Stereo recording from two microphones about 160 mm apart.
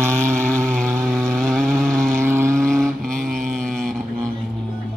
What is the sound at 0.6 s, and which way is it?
Vehicle, centre (ahead or behind).